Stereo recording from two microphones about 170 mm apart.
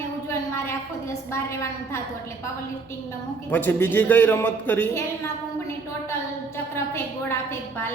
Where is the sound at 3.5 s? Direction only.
10° left (ahead or behind).